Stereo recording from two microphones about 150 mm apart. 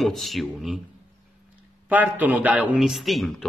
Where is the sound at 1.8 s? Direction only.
10° right (ahead or behind).